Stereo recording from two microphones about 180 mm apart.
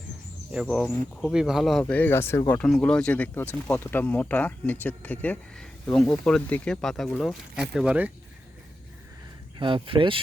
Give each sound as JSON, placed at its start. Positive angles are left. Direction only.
{"t": 0.5, "sound": "speech", "side_deg": 0}
{"t": 1.8, "sound": "speech", "side_deg": 10}
{"t": 9.6, "sound": "speech", "side_deg": -25}